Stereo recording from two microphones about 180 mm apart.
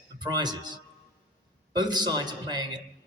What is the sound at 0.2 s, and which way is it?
Speech, 25° right (ahead or behind).